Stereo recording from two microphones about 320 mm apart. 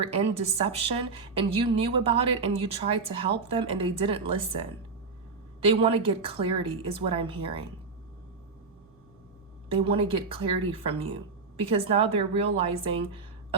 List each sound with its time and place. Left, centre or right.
0.0 s speech: centre
9.6 s speech: centre